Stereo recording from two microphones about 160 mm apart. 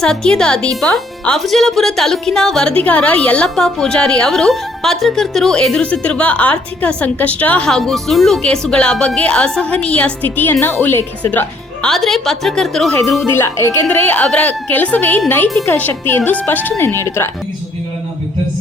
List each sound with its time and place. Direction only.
0.0 s a woman's voice: 5° left (ahead or behind)
13.1 s speech: 15° left (ahead or behind)